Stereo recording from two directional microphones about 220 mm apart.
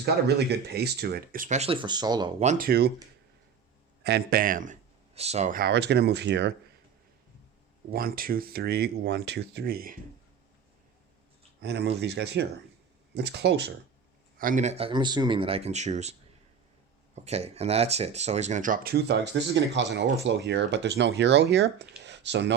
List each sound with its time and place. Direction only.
0.0 s speech: 50° right (ahead or behind); by 2.3 s 20° right (ahead or behind)
2.4 s speech: 35° right (ahead or behind)
4.0 s speech: 45° right (ahead or behind)
7.9 s speech: 40° right (ahead or behind)
11.6 s speech: 50° right (ahead or behind)
14.3 s speech: 35° right (ahead or behind)
17.2 s speech: 30° right (ahead or behind); by 22.5 s 55° right (ahead or behind)